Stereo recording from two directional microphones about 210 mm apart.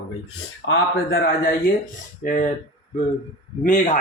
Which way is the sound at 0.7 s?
45° left (ahead or behind).